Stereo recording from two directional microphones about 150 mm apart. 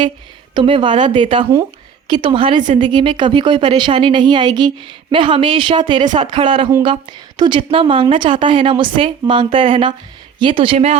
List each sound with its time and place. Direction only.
0.5 s a woman's voice: 35° right (ahead or behind)